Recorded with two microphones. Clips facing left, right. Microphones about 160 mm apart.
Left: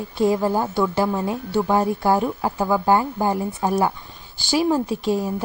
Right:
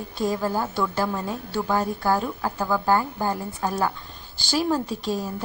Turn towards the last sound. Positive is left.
turn(degrees=15)  # may be behind; listen again after turning